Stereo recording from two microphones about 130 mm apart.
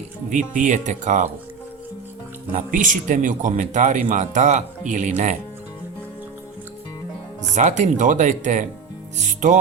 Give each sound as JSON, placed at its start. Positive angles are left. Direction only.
{"t": 0.3, "sound": "speech", "side_deg": -80}
{"t": 2.6, "sound": "speech", "side_deg": -90}
{"t": 7.5, "sound": "speech", "side_deg": -70}